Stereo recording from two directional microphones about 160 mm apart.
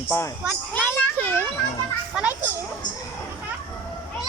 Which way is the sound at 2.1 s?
5° right (ahead or behind).